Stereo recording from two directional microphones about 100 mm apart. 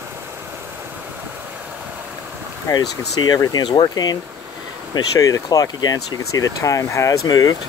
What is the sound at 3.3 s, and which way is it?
Speech, 45° left (ahead or behind).